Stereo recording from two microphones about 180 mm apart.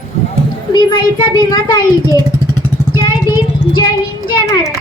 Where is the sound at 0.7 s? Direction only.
25° left (ahead or behind).